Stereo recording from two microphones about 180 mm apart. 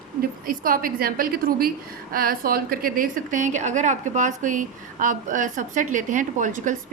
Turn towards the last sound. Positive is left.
turn(degrees=-45)  # may be behind; listen again after turning